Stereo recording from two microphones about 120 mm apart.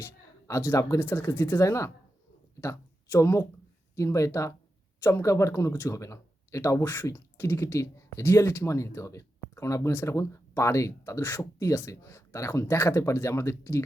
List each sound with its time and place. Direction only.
0.0 s speech: 20° left (ahead or behind)